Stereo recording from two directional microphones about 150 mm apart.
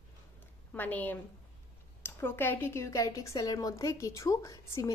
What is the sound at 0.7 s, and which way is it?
A woman's voice, 10° left (ahead or behind).